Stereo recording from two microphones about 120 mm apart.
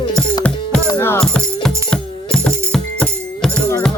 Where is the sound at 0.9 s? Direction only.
20° left (ahead or behind).